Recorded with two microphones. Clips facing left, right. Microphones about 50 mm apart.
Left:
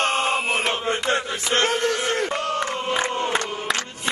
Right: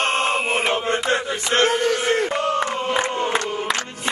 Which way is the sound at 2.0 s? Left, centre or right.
Centre.